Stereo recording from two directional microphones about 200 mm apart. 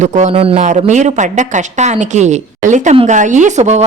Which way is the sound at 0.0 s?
30° right (ahead or behind).